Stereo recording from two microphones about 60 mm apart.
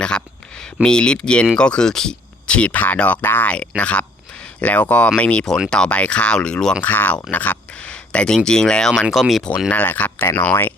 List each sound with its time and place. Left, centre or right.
0.0 s a sound: centre
1.5 s speech: centre; by 3.5 s left
3.8 s speech: centre
6.8 s speech: left; by 8.9 s centre
9.2 s speech: centre
9.6 s speech: left